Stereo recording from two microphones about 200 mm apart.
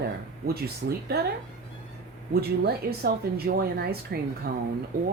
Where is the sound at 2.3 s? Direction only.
50° right (ahead or behind).